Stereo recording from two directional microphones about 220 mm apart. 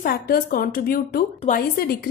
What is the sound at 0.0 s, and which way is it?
A woman's voice, 40° left (ahead or behind).